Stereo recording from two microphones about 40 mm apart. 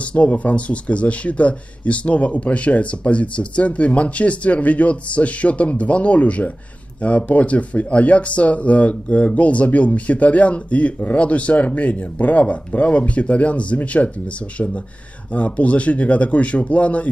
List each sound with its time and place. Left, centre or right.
0.0 s speech: left